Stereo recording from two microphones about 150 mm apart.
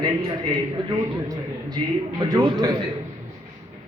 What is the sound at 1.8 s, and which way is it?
Speech, 40° right (ahead or behind).